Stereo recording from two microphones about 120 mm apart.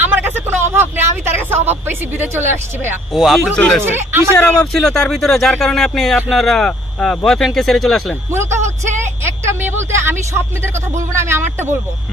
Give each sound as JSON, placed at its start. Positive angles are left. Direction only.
{"t": 0.0, "sound": "vehicle", "side_deg": -20}
{"t": 2.5, "sound": "speech", "side_deg": -20}
{"t": 3.1, "sound": "speech", "side_deg": 0}
{"t": 3.8, "sound": "speech", "side_deg": -20}
{"t": 4.6, "sound": "speech", "side_deg": 5}
{"t": 8.3, "sound": "speech", "side_deg": -20}
{"t": 9.2, "sound": "a sound", "side_deg": -20}
{"t": 10.0, "sound": "speech", "side_deg": -20}